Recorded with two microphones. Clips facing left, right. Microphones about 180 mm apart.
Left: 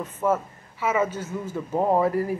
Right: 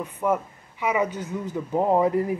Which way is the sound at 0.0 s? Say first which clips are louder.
Even; 15° right (ahead or behind).